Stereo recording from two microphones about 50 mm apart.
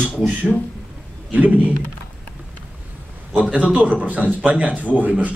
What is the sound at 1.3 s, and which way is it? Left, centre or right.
Speech, right.